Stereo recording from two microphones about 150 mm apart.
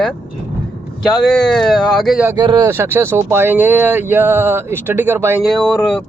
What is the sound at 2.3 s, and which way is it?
Speech, 25° right (ahead or behind).